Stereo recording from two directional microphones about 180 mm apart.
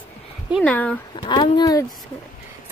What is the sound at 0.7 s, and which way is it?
Speech, 5° left (ahead or behind).